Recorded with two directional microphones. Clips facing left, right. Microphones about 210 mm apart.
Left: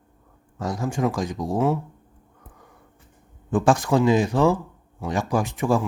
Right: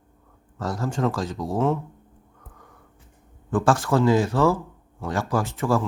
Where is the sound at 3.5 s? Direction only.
15° left (ahead or behind).